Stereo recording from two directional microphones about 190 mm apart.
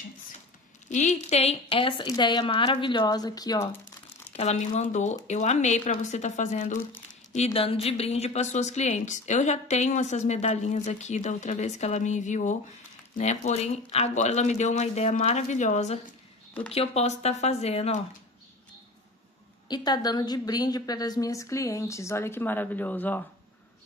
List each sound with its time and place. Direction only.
0.8 s speech: 40° left (ahead or behind); by 3.7 s 20° left (ahead or behind)
4.3 s a woman's voice: 35° left (ahead or behind)
19.7 s a woman's voice: 20° left (ahead or behind)